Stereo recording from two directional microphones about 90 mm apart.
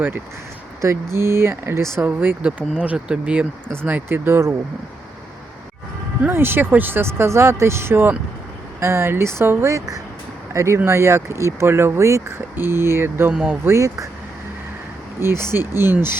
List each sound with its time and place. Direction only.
0.8 s speech: 30° right (ahead or behind)
6.2 s speech: 25° right (ahead or behind)
13.3 s speech: 10° right (ahead or behind)
13.7 s speech: 35° right (ahead or behind)
15.2 s speech: 30° right (ahead or behind)